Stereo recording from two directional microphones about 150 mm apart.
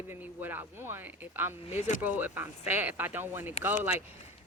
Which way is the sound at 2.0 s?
10° right (ahead or behind).